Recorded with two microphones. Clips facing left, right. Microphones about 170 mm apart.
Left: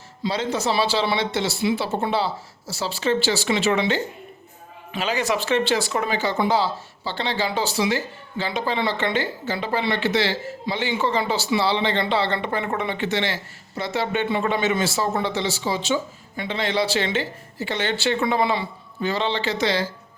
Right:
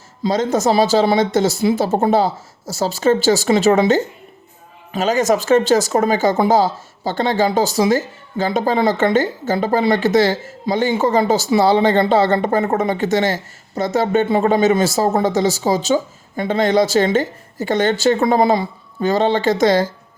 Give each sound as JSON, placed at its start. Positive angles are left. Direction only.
{"t": 0.2, "sound": "speech", "side_deg": -45}